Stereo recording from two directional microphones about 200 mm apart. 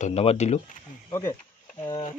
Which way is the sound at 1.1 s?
15° left (ahead or behind).